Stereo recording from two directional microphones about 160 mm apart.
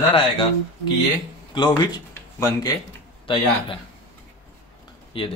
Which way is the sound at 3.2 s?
30° left (ahead or behind).